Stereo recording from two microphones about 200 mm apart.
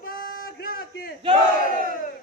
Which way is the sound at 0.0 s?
45° left (ahead or behind).